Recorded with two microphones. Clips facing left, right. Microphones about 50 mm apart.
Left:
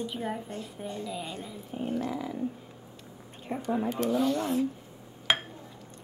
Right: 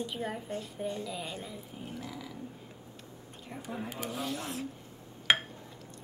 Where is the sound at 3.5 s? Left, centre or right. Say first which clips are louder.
Left 10 dB; left.